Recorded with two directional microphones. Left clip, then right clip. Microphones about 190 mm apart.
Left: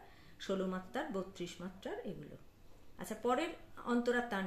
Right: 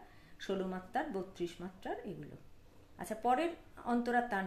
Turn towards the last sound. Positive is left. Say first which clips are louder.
# right 2 dB
turn(degrees=-30)  # may be behind; listen again after turning